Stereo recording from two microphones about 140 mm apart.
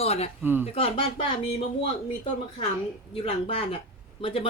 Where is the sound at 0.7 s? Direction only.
40° left (ahead or behind).